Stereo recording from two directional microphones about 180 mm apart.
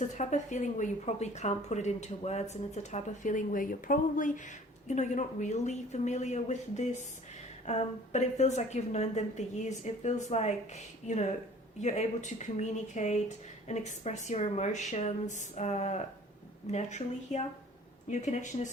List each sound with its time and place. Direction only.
0.0 s a woman's voice: 40° left (ahead or behind)